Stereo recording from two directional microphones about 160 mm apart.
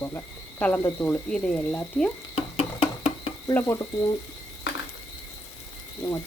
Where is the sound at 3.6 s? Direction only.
20° left (ahead or behind).